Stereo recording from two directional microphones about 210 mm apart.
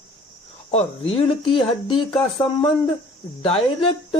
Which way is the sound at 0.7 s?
25° left (ahead or behind).